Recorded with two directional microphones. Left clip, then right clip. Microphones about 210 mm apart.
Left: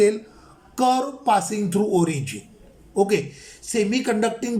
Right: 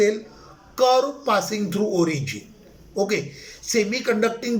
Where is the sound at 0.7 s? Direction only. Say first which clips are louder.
Right 2 dB; 30° left (ahead or behind).